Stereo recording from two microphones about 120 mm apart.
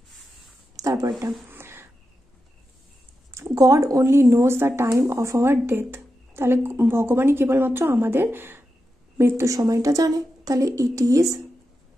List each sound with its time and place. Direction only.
0.7 s speech: 30° right (ahead or behind)
1.5 s a sound: 20° right (ahead or behind)
3.3 s a woman's voice: 25° right (ahead or behind)